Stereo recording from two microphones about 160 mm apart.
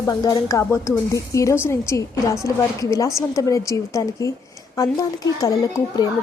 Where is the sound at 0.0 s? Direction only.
25° left (ahead or behind).